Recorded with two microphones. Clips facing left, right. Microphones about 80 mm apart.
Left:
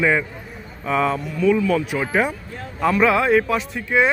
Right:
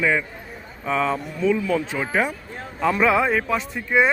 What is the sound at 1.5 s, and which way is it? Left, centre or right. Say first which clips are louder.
Speech: left 4 dB; centre.